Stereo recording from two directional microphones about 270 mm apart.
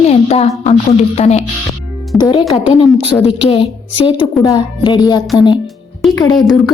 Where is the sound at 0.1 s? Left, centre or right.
Left.